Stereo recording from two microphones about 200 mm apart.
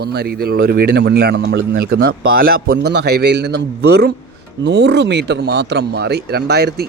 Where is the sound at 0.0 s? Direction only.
55° right (ahead or behind).